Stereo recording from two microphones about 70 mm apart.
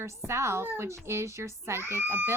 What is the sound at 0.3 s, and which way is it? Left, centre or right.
Speech, right.